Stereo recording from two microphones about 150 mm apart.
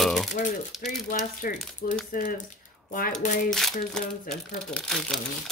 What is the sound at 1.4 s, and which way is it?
Speech, 65° left (ahead or behind).